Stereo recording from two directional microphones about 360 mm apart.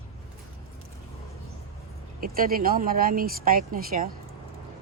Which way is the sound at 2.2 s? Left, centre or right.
Right.